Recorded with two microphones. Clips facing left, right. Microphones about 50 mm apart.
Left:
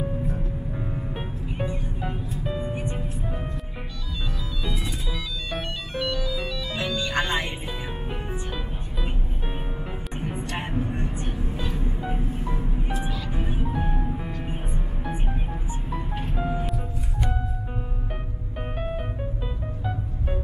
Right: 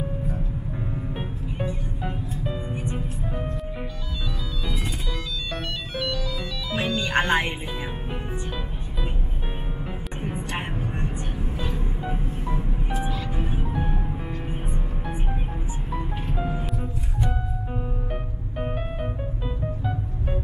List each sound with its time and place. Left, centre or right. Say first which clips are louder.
0.9 s music: right 1 dB; centre
5.5 s music: left 2 dB; centre
6.8 s music: right 3 dB; right
11.3 s vehicle: even; centre
13.6 s music: left 1 dB; centre
16.3 s music: left 2 dB; centre
18.6 s music: right 1 dB; centre